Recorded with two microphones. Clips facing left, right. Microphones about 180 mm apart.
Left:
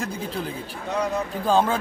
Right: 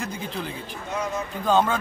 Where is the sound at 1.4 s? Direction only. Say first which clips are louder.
Even; 30° left (ahead or behind).